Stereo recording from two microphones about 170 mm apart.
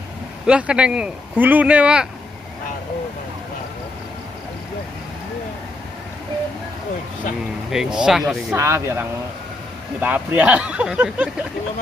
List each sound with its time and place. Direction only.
0.5 s speech: 5° right (ahead or behind)
7.7 s speech: 5° right (ahead or behind)
8.5 s speech: 15° right (ahead or behind)